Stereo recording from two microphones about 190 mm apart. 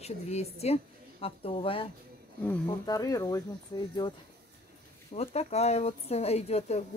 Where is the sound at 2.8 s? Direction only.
20° left (ahead or behind).